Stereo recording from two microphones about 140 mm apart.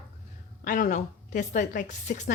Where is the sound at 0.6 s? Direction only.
70° left (ahead or behind).